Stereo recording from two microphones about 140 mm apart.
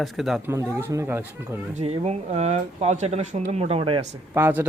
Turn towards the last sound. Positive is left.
turn(degrees=-15)  # may be behind; listen again after turning